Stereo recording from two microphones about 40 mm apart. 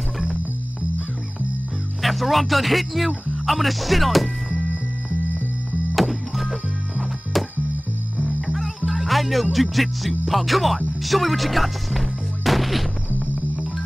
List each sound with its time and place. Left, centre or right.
2.0 s speech: centre
5.9 s music: centre
8.2 s music: right
8.5 s speech: centre
11.0 s music: centre